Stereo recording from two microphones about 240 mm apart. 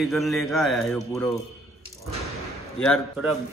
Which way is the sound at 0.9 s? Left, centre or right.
Centre.